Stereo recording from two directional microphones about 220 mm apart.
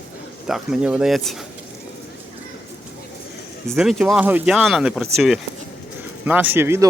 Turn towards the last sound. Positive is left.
turn(degrees=-10)  # may be behind; listen again after turning